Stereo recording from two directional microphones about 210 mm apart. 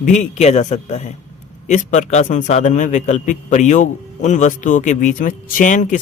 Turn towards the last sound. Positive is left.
turn(degrees=35)  # may be behind; listen again after turning